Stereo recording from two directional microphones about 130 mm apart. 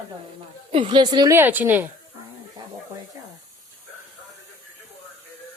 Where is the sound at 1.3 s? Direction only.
15° right (ahead or behind).